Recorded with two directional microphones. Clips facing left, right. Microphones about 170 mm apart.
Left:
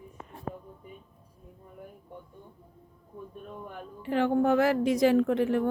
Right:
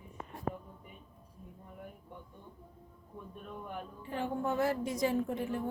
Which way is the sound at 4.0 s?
85° left.